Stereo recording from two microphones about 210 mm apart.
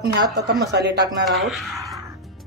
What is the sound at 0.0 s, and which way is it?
Speech, 50° right (ahead or behind).